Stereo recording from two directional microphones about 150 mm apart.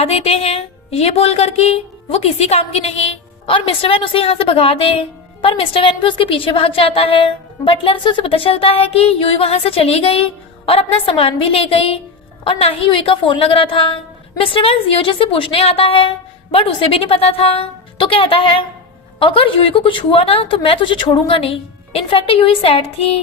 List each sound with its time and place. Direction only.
0.0 s a woman's voice: 40° left (ahead or behind)